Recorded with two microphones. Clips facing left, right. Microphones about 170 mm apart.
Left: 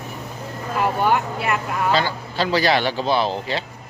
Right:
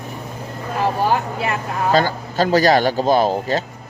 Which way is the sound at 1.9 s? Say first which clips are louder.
Right 4 dB; 45° right (ahead or behind).